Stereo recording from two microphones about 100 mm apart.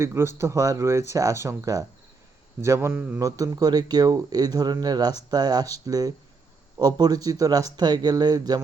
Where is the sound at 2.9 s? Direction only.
15° right (ahead or behind).